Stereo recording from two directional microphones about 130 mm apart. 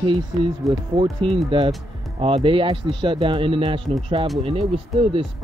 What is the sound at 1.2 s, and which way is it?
Speech, 40° right (ahead or behind).